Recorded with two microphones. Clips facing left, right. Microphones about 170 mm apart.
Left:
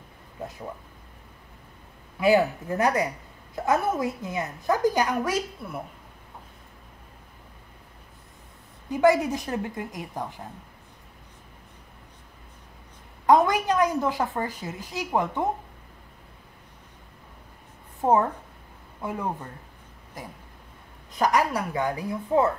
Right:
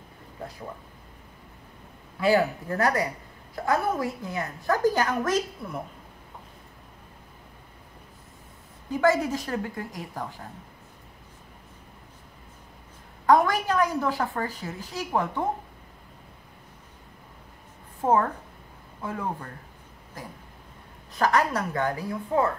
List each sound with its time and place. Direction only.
2.1 s a woman's voice: 15° left (ahead or behind)
8.9 s a woman's voice: 20° left (ahead or behind)
13.3 s a woman's voice: 20° left (ahead or behind)
18.0 s a woman's voice: 20° left (ahead or behind)
21.2 s a woman's voice: 15° left (ahead or behind)